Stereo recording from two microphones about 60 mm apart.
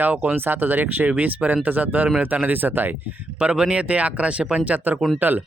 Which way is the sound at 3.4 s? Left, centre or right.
Centre.